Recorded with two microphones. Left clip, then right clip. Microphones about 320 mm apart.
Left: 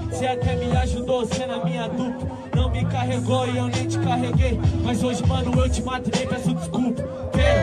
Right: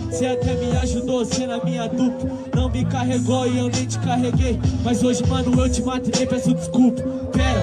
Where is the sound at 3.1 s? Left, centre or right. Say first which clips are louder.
Right 3 dB; left.